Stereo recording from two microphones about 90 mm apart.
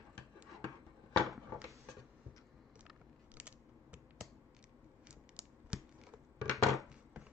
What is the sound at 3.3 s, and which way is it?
Mechanisms, 15° right (ahead or behind).